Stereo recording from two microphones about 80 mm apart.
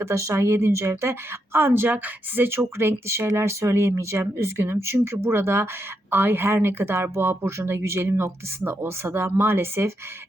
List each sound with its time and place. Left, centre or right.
0.0 s a woman's voice: right